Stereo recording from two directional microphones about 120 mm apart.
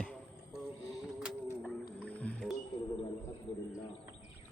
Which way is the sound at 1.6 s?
10° left (ahead or behind).